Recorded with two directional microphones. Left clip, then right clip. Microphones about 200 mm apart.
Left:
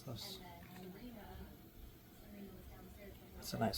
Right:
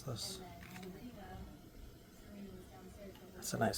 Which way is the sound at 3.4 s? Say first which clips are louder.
Right 3 dB; 20° right (ahead or behind).